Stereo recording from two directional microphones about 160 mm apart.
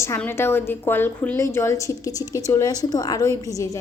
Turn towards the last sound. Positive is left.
turn(degrees=20)  # may be behind; listen again after turning